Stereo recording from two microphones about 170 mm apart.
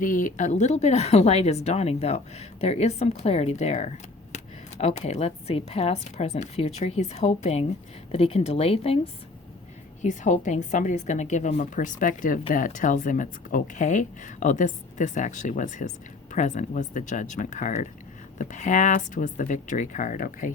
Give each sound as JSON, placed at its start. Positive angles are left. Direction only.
{"t": 0.0, "sound": "speech", "side_deg": 50}
{"t": 10.0, "sound": "a woman's voice", "side_deg": 45}